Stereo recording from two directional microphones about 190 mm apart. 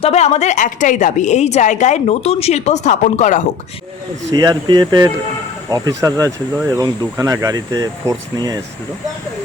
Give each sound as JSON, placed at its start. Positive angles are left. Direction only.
{"t": 0.0, "sound": "a woman's voice", "side_deg": 35}
{"t": 4.4, "sound": "speech", "side_deg": -20}